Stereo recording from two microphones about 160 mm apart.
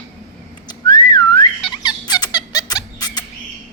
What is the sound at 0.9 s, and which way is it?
Whistling, 20° left (ahead or behind).